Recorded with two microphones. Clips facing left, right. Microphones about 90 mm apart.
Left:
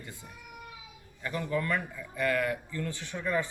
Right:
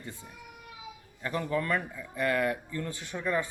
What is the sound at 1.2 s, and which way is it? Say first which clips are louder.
A man's voice: right 1 dB; 30° right (ahead or behind).